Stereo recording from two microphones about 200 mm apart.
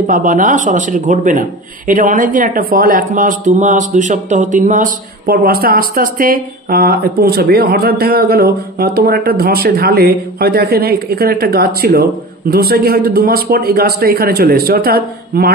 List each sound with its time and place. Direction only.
0.0 s a man's voice: 40° right (ahead or behind)